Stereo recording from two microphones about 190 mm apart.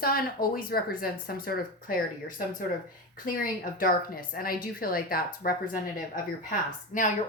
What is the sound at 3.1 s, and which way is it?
A woman's voice, 45° left (ahead or behind).